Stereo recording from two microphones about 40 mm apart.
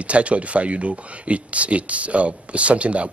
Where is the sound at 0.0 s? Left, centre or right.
Right.